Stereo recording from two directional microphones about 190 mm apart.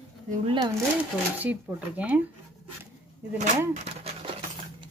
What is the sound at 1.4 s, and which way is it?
Speech, 10° right (ahead or behind).